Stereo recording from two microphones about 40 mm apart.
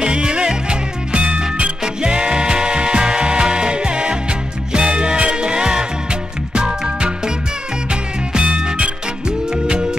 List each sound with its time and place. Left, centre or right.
0.0 s music: right